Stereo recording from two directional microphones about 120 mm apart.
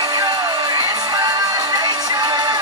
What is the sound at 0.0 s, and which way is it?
Music, 30° right (ahead or behind).